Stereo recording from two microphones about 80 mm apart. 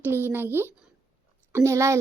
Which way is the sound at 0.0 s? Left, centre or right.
Right.